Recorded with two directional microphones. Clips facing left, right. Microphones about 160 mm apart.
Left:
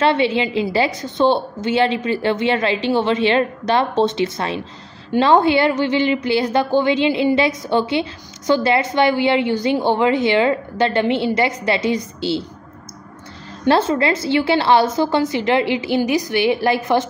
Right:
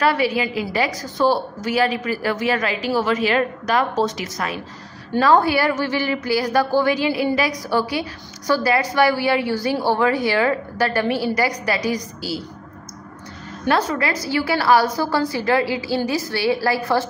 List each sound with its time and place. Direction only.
0.0 s a woman's voice: 25° left (ahead or behind)
13.7 s a woman's voice: 25° left (ahead or behind)